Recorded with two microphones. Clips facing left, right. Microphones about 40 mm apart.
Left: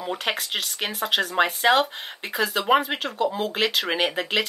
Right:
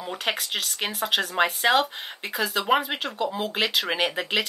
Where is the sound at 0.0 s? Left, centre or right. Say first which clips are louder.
Left 1 dB; centre.